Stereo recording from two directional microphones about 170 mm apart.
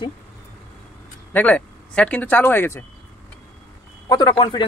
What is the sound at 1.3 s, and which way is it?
Speech, 10° left (ahead or behind).